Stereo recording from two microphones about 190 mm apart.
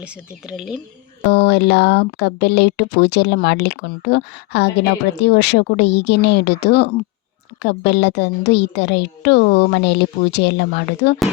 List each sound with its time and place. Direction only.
0.5 s speech: 5° right (ahead or behind)
1.3 s speech: 65° left (ahead or behind)